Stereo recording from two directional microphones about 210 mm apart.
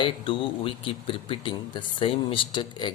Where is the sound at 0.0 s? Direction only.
25° left (ahead or behind).